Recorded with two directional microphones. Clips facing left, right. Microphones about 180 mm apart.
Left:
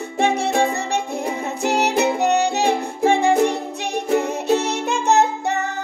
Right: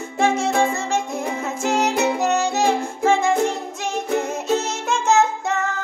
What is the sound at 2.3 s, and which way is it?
Music, 35° left (ahead or behind).